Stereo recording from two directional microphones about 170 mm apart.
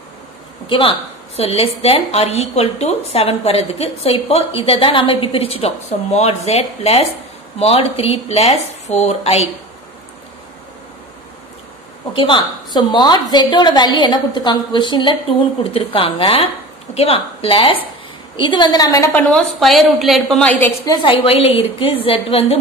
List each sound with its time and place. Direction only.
0.7 s a woman's voice: 30° left (ahead or behind)
12.1 s a woman's voice: 30° left (ahead or behind)
19.2 s a woman's voice: centre (ahead or behind)
20.8 s a woman's voice: 25° left (ahead or behind)